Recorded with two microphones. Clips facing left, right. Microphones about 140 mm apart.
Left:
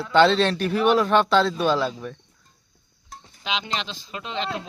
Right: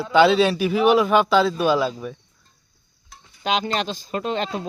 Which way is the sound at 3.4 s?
45° right (ahead or behind).